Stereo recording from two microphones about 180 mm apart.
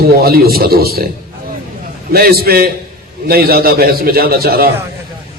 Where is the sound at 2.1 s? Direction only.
60° right (ahead or behind).